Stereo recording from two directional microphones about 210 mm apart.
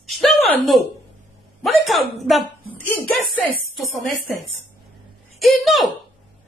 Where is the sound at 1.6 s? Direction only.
Centre (ahead or behind).